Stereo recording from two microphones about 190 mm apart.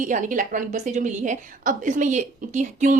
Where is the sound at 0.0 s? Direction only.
40° right (ahead or behind).